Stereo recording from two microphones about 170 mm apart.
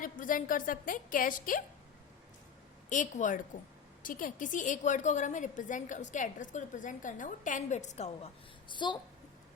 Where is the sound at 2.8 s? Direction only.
50° left (ahead or behind); by 9.0 s 25° left (ahead or behind).